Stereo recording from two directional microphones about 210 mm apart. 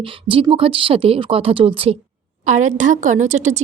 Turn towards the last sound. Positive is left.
turn(degrees=-35)  # may be behind; listen again after turning